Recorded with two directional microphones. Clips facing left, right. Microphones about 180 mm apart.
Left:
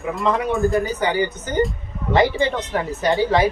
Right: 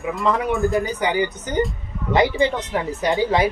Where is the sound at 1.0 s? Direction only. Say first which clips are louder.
Even; 15° right (ahead or behind).